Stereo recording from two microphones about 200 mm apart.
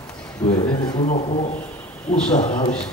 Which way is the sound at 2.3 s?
35° left (ahead or behind).